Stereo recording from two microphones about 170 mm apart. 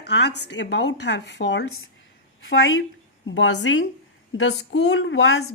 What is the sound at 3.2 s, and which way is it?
Speech, 90° left.